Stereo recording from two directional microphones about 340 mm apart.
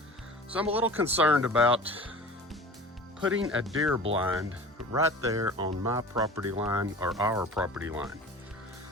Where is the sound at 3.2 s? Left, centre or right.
Right.